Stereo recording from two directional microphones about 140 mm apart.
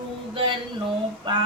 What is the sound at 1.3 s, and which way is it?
Female singing, 30° right (ahead or behind).